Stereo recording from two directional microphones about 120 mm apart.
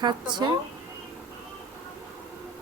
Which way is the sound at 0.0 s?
40° right (ahead or behind).